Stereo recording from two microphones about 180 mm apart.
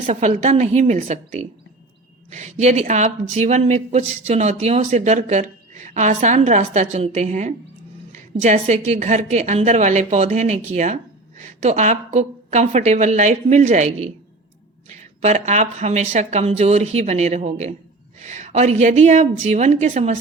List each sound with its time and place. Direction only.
0.0 s a woman's voice: 40° right (ahead or behind)